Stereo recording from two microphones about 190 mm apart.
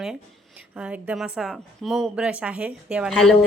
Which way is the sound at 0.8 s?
5° right (ahead or behind).